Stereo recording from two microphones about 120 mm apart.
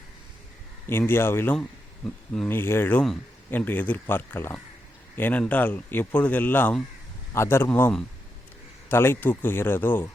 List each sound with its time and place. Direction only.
0.9 s speech: 20° left (ahead or behind)